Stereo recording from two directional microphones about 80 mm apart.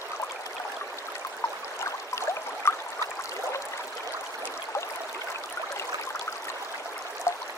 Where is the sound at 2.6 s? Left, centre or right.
Left.